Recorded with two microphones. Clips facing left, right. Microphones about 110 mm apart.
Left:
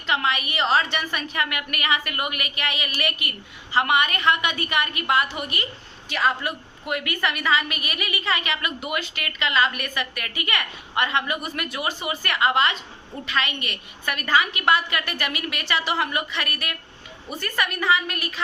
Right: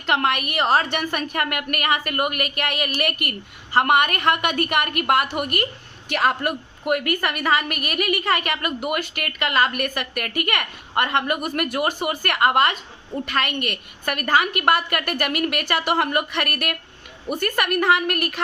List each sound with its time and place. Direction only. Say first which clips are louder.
0.0 s a woman's voice: right 3 dB; 60° right (ahead or behind)